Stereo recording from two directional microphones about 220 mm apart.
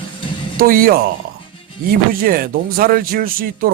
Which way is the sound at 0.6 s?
40° right (ahead or behind).